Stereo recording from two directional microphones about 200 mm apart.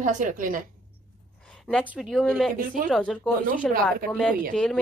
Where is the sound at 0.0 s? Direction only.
40° right (ahead or behind).